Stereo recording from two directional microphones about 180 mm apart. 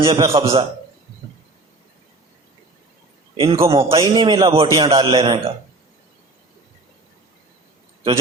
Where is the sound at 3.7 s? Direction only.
30° right (ahead or behind).